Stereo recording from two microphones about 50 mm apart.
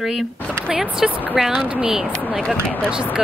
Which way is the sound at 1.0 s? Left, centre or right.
Centre.